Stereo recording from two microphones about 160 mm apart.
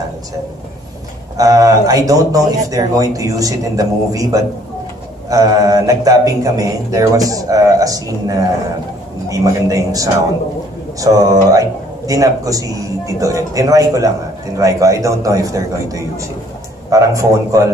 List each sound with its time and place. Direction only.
1.4 s speech: 20° right (ahead or behind)